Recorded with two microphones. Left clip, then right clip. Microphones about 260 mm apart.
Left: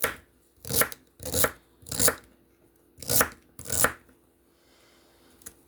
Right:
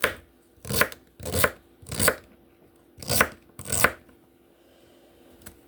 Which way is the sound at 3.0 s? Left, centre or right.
Centre.